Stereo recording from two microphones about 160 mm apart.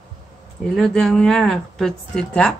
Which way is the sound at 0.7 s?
Centre (ahead or behind).